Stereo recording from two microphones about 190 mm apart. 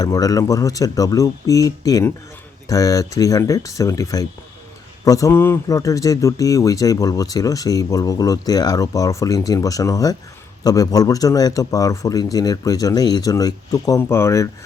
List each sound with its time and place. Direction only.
0.0 s a man's voice: 20° left (ahead or behind)